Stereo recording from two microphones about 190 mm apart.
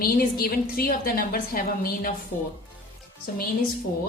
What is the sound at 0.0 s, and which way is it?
A woman's voice, 50° left (ahead or behind).